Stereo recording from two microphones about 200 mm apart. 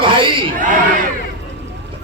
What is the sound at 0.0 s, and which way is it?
Crowd, 25° right (ahead or behind).